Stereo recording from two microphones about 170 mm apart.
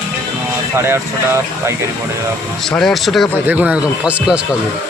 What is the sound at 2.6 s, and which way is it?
Speech, centre (ahead or behind).